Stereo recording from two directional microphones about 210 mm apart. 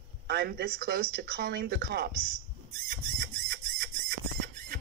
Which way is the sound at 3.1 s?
45° right (ahead or behind).